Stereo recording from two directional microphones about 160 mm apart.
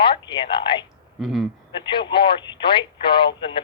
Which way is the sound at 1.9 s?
30° left (ahead or behind).